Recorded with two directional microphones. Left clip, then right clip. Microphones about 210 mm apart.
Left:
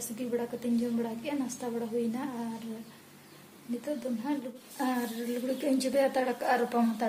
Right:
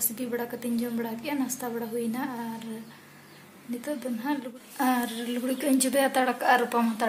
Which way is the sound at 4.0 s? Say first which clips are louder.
Right 3 dB; 5° left (ahead or behind).